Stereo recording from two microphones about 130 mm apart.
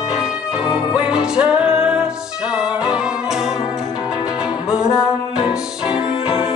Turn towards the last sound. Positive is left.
turn(degrees=-5)  # may be behind; listen again after turning